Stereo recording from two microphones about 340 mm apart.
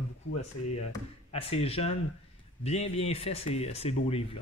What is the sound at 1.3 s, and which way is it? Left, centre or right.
Speech, centre.